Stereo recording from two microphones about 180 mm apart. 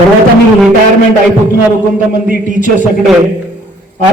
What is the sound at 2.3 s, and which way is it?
Speech, 45° right (ahead or behind).